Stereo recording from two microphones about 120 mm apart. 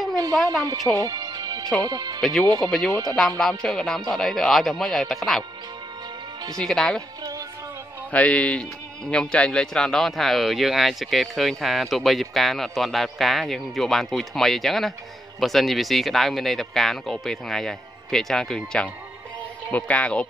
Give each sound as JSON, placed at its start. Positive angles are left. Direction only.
{"t": 0.1, "sound": "a sound", "side_deg": -30}
{"t": 0.9, "sound": "music", "side_deg": -30}
{"t": 1.8, "sound": "speech", "side_deg": -30}
{"t": 2.6, "sound": "speech", "side_deg": 5}
{"t": 6.6, "sound": "speech", "side_deg": 5}
{"t": 8.1, "sound": "speech", "side_deg": 10}